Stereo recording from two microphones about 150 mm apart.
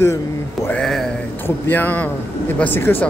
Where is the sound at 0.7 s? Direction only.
5° left (ahead or behind).